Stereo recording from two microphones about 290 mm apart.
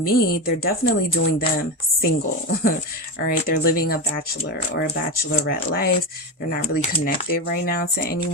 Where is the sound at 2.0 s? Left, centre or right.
Left.